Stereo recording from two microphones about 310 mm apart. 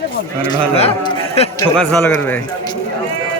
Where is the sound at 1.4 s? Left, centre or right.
Centre.